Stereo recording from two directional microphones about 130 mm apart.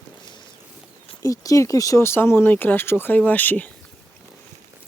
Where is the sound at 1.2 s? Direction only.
25° left (ahead or behind).